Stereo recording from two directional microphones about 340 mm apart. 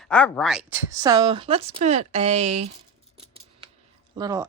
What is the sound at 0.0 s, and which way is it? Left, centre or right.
Speech, centre.